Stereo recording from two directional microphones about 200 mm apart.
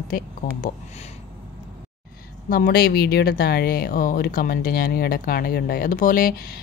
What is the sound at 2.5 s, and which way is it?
A woman's voice, 50° left (ahead or behind).